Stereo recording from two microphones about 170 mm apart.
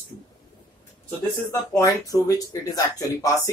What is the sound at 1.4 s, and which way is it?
A man's voice, 20° left (ahead or behind).